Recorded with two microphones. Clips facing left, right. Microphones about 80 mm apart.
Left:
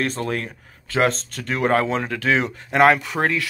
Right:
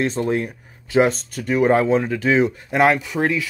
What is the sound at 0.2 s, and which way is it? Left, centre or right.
Speech, left.